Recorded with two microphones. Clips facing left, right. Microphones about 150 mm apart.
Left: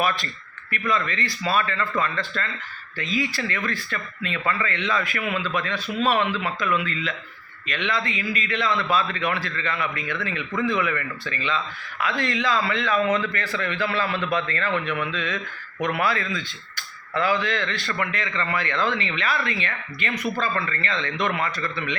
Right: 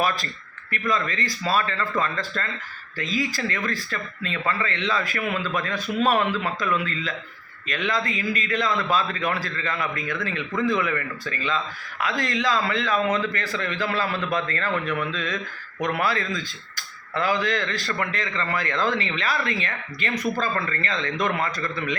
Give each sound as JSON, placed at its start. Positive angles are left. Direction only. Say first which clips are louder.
{"t": 0.7, "sound": "a man's voice", "louder": "even", "side_deg": -40}
{"t": 7.7, "sound": "a man's voice", "louder": "right 1 dB", "side_deg": -40}